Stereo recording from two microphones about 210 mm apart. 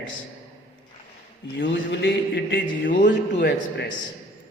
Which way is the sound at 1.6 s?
60° left (ahead or behind).